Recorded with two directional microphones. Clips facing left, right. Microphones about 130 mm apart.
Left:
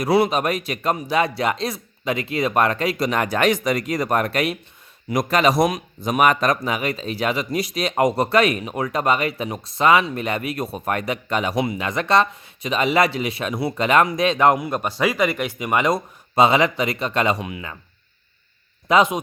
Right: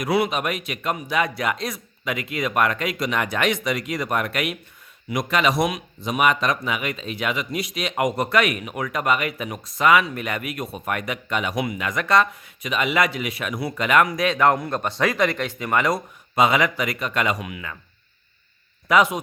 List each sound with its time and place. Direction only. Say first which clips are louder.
0.0 s speech: left 4 dB; 35° left (ahead or behind); by 16.0 s 20° left (ahead or behind)
16.3 s a man's voice: left 3 dB; 30° left (ahead or behind)
18.9 s a man's voice: left 2 dB; 25° left (ahead or behind)